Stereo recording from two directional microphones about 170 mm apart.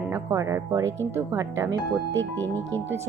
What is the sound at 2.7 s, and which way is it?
Speech, 10° left (ahead or behind).